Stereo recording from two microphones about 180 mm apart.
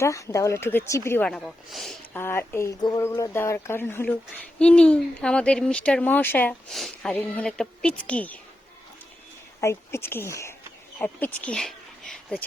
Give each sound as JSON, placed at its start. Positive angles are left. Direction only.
{"t": 0.0, "sound": "speech", "side_deg": 15}
{"t": 1.3, "sound": "speech", "side_deg": 0}
{"t": 2.1, "sound": "speech", "side_deg": 10}
{"t": 9.6, "sound": "speech", "side_deg": 15}